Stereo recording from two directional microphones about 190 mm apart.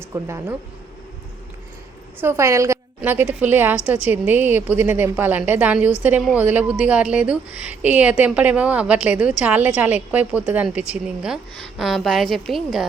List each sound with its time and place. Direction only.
0.0 s a woman's voice: 15° right (ahead or behind)
2.2 s a woman's voice: 15° right (ahead or behind)